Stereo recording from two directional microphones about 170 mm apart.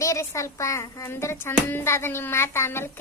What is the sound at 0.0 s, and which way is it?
Speech, 20° left (ahead or behind).